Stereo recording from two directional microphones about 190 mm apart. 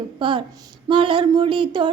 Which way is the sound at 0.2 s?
25° right (ahead or behind).